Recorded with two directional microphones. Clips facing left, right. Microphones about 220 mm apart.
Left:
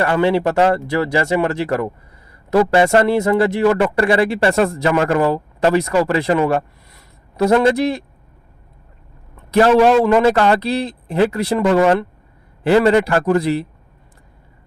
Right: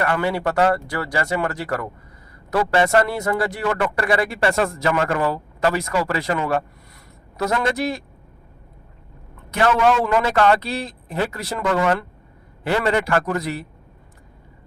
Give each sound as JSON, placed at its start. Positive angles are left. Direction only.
{"t": 0.0, "sound": "a man's voice", "side_deg": 25}
{"t": 9.5, "sound": "a man's voice", "side_deg": 35}